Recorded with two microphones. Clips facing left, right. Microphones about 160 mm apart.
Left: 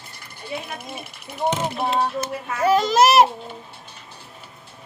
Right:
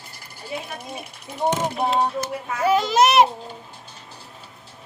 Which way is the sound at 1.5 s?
15° right (ahead or behind).